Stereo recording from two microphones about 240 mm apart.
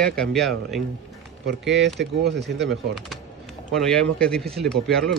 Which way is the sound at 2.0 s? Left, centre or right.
Right.